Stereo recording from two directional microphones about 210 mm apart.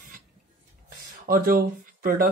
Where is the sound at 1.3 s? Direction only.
45° right (ahead or behind).